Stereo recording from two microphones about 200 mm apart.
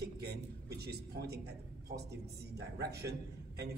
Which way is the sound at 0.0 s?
55° right (ahead or behind).